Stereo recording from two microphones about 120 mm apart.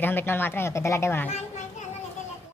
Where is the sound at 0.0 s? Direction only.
20° left (ahead or behind).